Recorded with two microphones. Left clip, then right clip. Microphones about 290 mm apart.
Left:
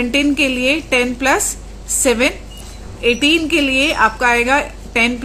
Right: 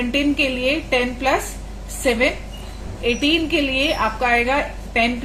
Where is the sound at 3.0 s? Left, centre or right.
Left.